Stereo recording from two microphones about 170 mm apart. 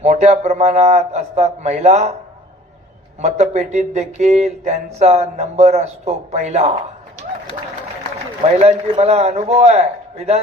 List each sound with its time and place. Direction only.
0.0 s a man's voice: 40° right (ahead or behind)
3.2 s a man's voice: 40° right (ahead or behind)
8.5 s a man's voice: 40° right (ahead or behind)